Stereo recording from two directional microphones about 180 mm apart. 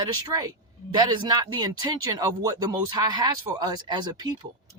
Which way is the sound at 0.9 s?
25° right (ahead or behind).